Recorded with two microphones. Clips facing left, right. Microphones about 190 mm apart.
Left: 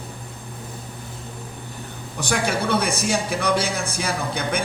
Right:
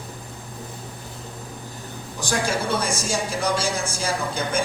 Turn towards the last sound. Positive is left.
turn(degrees=60)  # may be behind; listen again after turning